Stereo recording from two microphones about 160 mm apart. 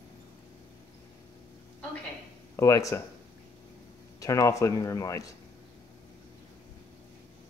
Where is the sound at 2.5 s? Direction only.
20° left (ahead or behind).